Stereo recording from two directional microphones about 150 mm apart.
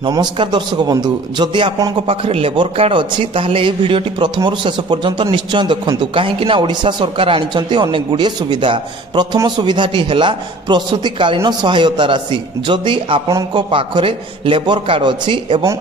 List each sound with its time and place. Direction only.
0.1 s a man's voice: 30° right (ahead or behind)
13.3 s a man's voice: 20° right (ahead or behind)
13.6 s a man's voice: 35° right (ahead or behind)